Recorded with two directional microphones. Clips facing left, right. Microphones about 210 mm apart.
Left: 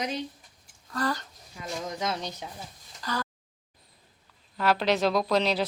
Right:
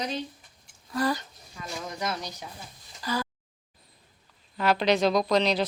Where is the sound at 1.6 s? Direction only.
20° left (ahead or behind).